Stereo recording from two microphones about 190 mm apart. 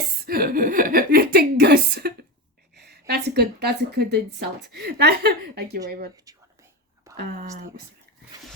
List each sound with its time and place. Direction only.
0.3 s a woman's voice: 50° right (ahead or behind)
6.2 s whispering: 15° right (ahead or behind)